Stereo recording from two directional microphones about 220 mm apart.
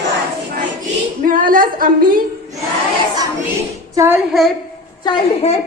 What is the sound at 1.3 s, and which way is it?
Speech, 40° right (ahead or behind).